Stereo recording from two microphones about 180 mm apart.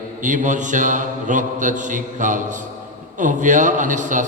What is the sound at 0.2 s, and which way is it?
A man's voice, 45° right (ahead or behind).